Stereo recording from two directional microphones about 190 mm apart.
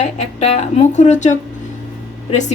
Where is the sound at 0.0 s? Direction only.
35° left (ahead or behind).